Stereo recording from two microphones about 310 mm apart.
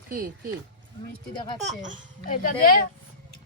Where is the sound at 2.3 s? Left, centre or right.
Left.